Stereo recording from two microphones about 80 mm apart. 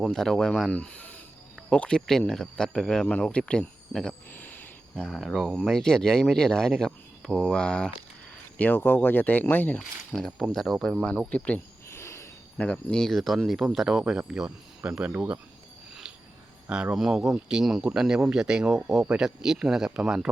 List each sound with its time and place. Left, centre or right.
0.0 s speech: centre
4.3 s speech: left
4.9 s speech: centre; by 9.7 s left
9.7 s speech: centre
11.3 s speech: centre
11.9 s a sound: left
12.5 s speech: centre
16.6 s speech: centre
16.9 s speech: centre